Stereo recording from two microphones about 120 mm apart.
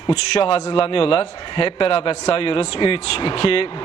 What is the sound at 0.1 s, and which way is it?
Speech, 55° left (ahead or behind).